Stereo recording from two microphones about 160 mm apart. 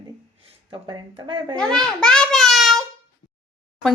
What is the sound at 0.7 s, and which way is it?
Speech, 25° right (ahead or behind).